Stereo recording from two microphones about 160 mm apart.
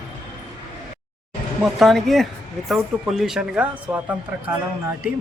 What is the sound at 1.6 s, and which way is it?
Speech, centre (ahead or behind).